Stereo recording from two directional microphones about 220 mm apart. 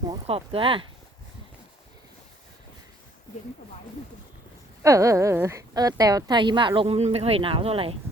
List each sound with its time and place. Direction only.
0.1 s a woman's voice: 25° right (ahead or behind)
4.8 s a woman's voice: 15° right (ahead or behind)